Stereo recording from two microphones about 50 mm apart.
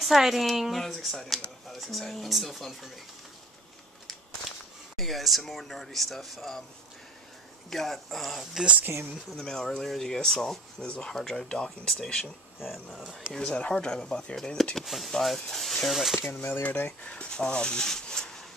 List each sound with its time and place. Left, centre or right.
0.0 s speech: centre
4.1 s speech: centre
7.7 s speech: centre
9.3 s speech: centre
12.5 s speech: centre
16.6 s speech: left
17.0 s speech: left